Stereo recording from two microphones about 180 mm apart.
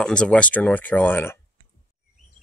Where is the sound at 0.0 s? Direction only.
5° left (ahead or behind).